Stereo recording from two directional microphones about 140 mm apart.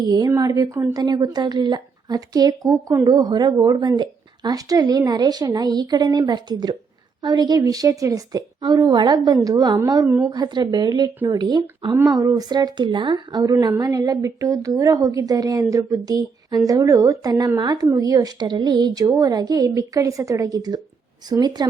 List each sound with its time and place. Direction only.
0.0 s speech: 30° right (ahead or behind)